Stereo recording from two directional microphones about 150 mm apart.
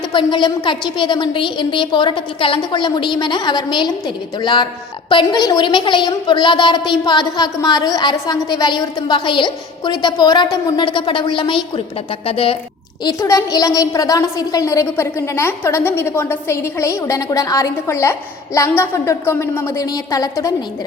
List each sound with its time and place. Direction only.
0.1 s a woman's voice: 30° left (ahead or behind)
13.1 s a woman's voice: 20° left (ahead or behind)